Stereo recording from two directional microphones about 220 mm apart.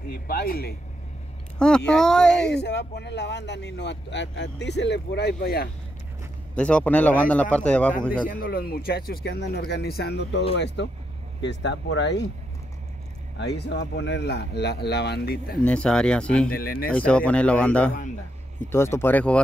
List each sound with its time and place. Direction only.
0.1 s speech: 40° left (ahead or behind)
1.9 s a man's voice: 5° left (ahead or behind)
2.4 s speech: 50° left (ahead or behind)
6.5 s a man's voice: 5° left (ahead or behind)
8.3 s speech: 40° left (ahead or behind)
13.6 s speech: 50° left (ahead or behind)
15.6 s a man's voice: 5° left (ahead or behind)
16.5 s speech: 40° left (ahead or behind)
16.9 s a man's voice: 5° left (ahead or behind)